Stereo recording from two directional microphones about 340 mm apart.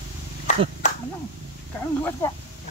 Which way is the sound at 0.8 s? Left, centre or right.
Centre.